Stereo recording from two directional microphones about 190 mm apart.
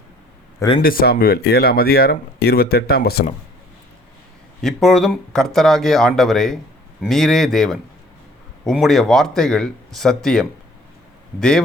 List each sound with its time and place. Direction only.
0.8 s speech: 50° left (ahead or behind)
4.6 s speech: centre (ahead or behind)